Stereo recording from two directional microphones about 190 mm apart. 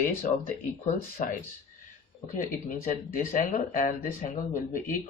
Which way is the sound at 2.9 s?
45° left (ahead or behind).